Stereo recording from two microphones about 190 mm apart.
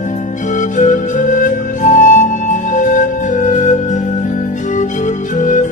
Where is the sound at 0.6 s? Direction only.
40° left (ahead or behind).